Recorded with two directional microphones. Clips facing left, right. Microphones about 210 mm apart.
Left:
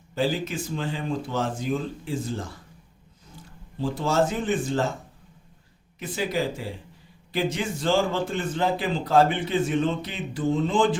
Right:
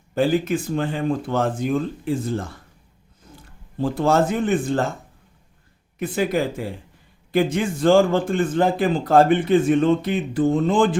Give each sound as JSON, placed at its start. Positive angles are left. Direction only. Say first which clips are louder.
{"t": 0.1, "sound": "speech", "louder": "right 7 dB", "side_deg": -55}
{"t": 3.8, "sound": "speech", "louder": "right 5 dB", "side_deg": -55}
{"t": 6.0, "sound": "a man's voice", "louder": "right 5 dB", "side_deg": -55}